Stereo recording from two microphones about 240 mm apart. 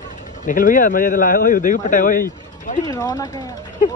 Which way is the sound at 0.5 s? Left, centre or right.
Left.